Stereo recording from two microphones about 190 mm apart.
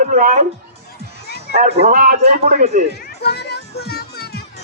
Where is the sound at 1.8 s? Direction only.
45° right (ahead or behind).